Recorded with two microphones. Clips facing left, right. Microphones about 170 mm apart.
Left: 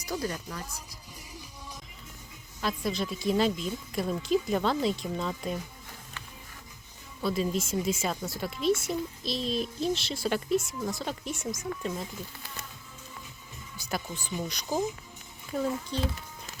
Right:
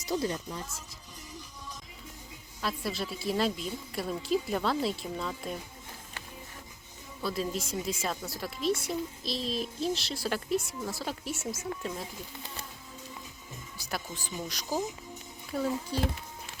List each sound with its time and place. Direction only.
0.0 s speech: 25° right (ahead or behind)
0.3 s speech: 10° right (ahead or behind)
2.6 s speech: 5° right (ahead or behind)
7.2 s speech: centre (ahead or behind)
13.7 s speech: centre (ahead or behind)
15.9 s speech: 10° right (ahead or behind)